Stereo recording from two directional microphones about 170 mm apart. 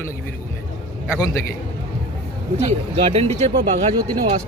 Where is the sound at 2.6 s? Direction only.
35° right (ahead or behind).